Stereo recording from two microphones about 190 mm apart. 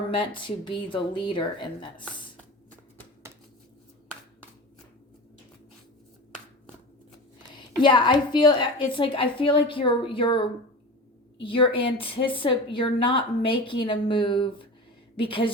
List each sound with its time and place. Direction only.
0.1 s a woman's voice: 25° left (ahead or behind)
2.4 s a sound: 10° left (ahead or behind)
7.5 s a woman's voice: 25° left (ahead or behind)